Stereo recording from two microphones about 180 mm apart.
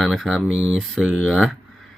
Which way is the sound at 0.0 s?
Centre (ahead or behind).